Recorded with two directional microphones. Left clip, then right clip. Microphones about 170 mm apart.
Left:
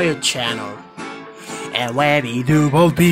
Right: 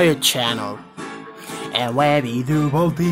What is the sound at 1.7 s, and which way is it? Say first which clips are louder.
Speech: left 1 dB; centre (ahead or behind).